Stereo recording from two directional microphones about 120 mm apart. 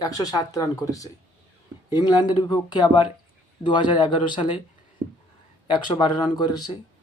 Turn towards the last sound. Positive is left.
turn(degrees=35)  # may be behind; listen again after turning